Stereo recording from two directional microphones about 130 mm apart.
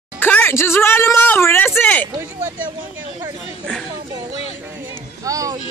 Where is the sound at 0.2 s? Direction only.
15° left (ahead or behind).